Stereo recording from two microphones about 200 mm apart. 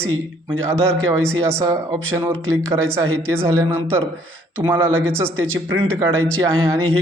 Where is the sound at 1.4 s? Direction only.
15° right (ahead or behind).